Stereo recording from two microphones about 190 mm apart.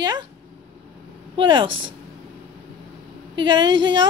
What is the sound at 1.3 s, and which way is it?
Speech, 25° right (ahead or behind).